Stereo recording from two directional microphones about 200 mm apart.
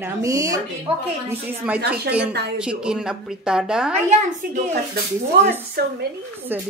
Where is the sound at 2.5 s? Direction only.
5° right (ahead or behind).